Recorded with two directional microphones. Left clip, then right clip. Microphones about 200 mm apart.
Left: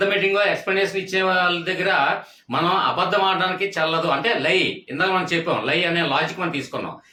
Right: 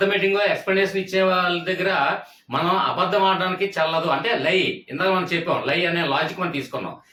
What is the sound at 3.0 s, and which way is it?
Speech, 30° left (ahead or behind).